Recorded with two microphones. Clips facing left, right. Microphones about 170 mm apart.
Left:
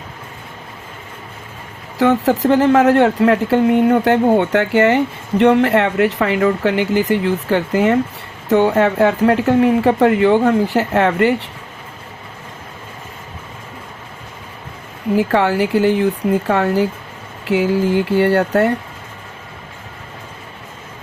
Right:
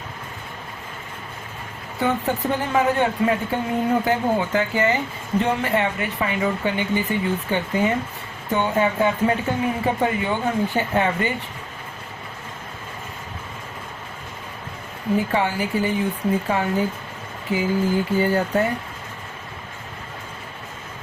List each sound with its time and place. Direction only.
2.0 s speech: 90° left
15.1 s speech: 80° left